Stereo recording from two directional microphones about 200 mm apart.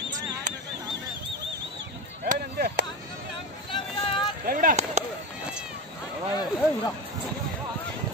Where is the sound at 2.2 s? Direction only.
50° right (ahead or behind).